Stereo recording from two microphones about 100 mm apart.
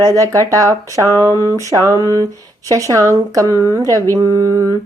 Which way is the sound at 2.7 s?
35° right (ahead or behind).